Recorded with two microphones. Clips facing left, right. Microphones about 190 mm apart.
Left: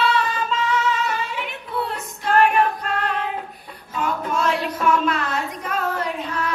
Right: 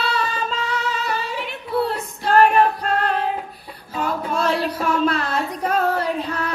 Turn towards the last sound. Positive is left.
turn(degrees=-35)  # may be behind; listen again after turning